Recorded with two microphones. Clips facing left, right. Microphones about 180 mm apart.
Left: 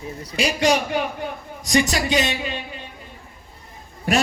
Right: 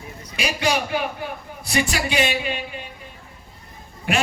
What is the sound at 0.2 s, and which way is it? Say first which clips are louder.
A man's voice: left 4 dB; 35° left (ahead or behind).